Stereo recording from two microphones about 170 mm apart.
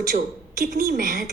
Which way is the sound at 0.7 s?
55° right (ahead or behind).